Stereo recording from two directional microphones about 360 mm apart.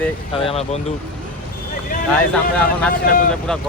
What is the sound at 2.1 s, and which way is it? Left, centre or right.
Speech, centre.